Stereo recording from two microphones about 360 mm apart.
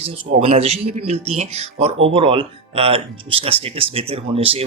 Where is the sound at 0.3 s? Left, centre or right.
Centre.